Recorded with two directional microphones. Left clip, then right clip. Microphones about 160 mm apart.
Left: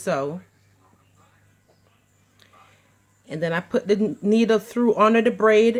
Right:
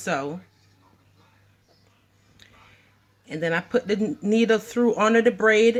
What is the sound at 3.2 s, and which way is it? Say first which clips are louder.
Speech: even; 50° left (ahead or behind).